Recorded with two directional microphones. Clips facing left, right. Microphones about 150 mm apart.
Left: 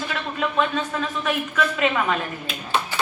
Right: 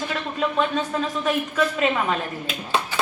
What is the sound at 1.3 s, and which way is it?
Speech, 35° right (ahead or behind).